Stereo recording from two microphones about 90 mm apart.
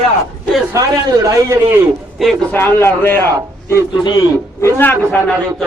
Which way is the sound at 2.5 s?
25° left (ahead or behind).